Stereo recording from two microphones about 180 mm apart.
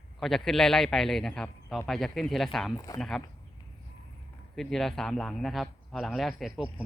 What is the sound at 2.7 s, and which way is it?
Speech, 20° left (ahead or behind).